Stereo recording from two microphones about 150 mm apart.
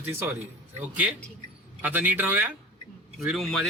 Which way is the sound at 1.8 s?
10° right (ahead or behind).